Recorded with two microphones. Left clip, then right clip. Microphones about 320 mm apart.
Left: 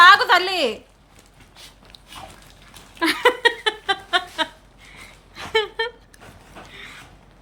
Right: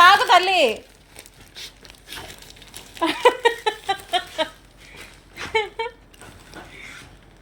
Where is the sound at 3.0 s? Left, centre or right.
Left.